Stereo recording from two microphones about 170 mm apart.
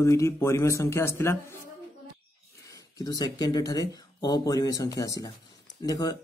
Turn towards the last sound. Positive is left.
turn(degrees=20)  # may be behind; listen again after turning